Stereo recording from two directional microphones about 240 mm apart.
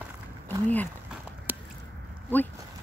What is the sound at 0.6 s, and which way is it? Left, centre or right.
Speech, centre.